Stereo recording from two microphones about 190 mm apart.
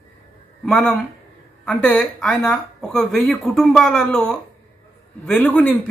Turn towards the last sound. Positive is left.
turn(degrees=5)  # may be behind; listen again after turning